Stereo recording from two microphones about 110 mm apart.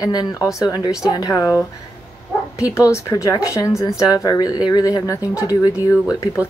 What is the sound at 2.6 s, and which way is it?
Speech, 30° left (ahead or behind).